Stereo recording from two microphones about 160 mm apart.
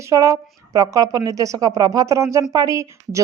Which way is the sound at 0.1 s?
20° right (ahead or behind).